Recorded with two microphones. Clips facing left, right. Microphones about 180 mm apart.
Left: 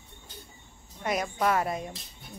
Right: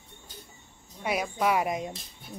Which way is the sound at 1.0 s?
5° right (ahead or behind).